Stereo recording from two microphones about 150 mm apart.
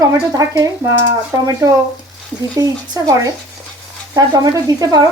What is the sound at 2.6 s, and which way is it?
Speech, 25° right (ahead or behind).